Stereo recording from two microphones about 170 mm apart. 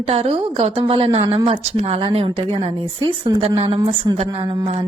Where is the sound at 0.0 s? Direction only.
35° right (ahead or behind).